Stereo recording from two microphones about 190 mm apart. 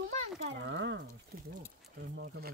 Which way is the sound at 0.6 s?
65° right (ahead or behind).